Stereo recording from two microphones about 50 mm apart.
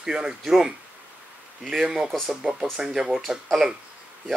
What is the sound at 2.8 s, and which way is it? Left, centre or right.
Speech, centre.